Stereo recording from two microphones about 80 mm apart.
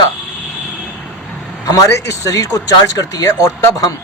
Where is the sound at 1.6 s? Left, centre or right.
Left.